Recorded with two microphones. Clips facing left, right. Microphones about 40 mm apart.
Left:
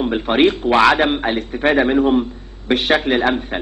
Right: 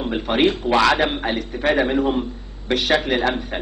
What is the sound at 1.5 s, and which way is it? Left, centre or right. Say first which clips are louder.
Speech: left 4 dB; left.